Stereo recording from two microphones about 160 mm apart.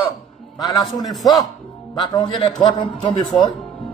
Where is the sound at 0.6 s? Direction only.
25° left (ahead or behind).